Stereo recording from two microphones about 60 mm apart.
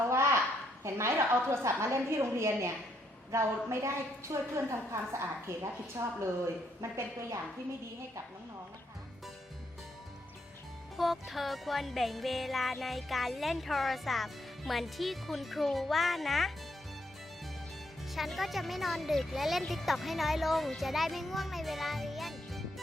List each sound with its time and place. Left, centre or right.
0.1 s a sound: right
0.9 s a woman's voice: right
10.9 s music: centre
18.1 s music: centre